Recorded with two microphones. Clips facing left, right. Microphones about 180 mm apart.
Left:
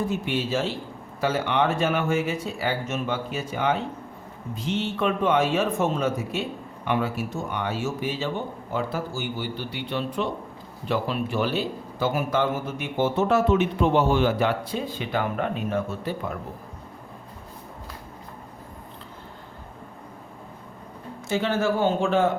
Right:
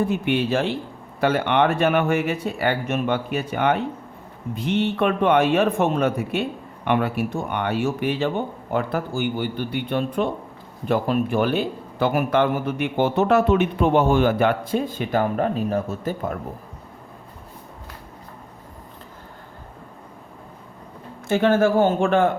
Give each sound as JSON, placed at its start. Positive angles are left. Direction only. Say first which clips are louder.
{"t": 0.1, "sound": "a man's voice", "louder": "right 5 dB", "side_deg": -60}
{"t": 21.2, "sound": "a man's voice", "louder": "right 6 dB", "side_deg": -55}